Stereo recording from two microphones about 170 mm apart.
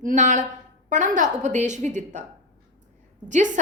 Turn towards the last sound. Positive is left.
turn(degrees=-45)  # may be behind; listen again after turning